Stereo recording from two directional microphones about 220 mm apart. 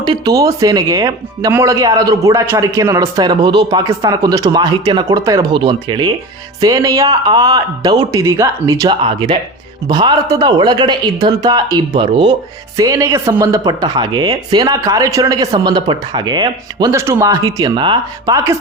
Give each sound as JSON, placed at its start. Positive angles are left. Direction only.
{"t": 0.0, "sound": "speech", "side_deg": -20}